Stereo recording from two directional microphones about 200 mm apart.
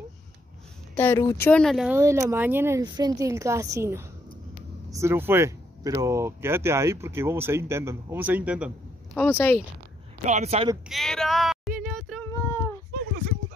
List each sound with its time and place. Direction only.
0.9 s speech: 10° left (ahead or behind)
2.0 s speech: 15° right (ahead or behind)
9.1 s speech: 10° left (ahead or behind)
10.2 s speech: 35° right (ahead or behind)
10.9 s female singing: centre (ahead or behind)